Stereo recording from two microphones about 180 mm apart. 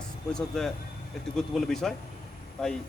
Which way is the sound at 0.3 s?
5° left (ahead or behind).